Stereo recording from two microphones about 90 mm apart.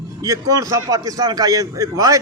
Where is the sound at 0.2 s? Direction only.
40° right (ahead or behind).